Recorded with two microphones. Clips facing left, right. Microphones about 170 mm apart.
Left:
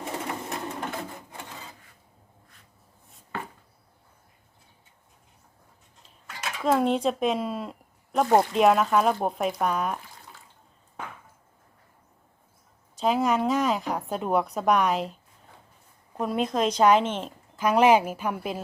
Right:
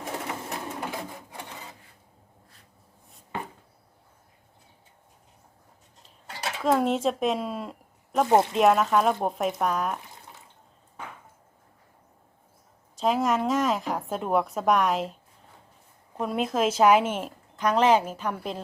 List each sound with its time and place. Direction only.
0.0 s sewing machine: centre (ahead or behind)
6.2 s a sound: 35° right (ahead or behind)
6.6 s a woman's voice: centre (ahead or behind)
13.0 s a woman's voice: centre (ahead or behind)
17.6 s a woman's voice: 10° left (ahead or behind)